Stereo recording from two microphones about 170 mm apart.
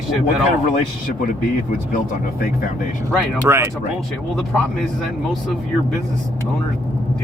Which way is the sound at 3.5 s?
15° right (ahead or behind).